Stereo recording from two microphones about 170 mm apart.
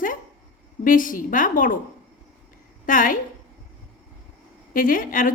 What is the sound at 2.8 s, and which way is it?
Speech, 55° left (ahead or behind).